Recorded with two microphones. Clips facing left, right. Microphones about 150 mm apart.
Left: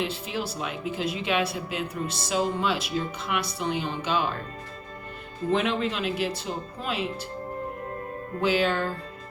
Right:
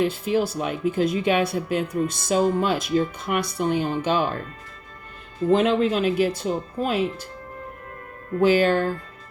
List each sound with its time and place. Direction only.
0.0 s speech: 50° right (ahead or behind)
5.5 s speech: 45° right (ahead or behind)
8.4 s speech: 45° right (ahead or behind)